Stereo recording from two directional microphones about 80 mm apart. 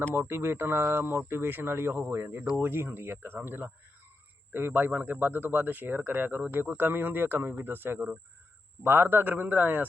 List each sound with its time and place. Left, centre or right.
0.1 s speech: right